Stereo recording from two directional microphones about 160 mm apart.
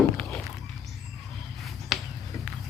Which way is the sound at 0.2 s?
5° left (ahead or behind).